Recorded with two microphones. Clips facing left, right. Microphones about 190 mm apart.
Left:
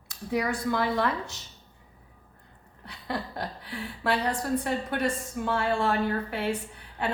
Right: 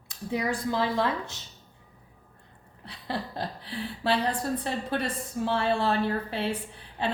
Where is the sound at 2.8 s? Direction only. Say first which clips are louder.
Even; 30° right (ahead or behind).